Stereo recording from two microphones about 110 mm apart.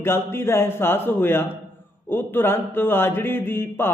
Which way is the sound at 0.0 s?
20° left (ahead or behind).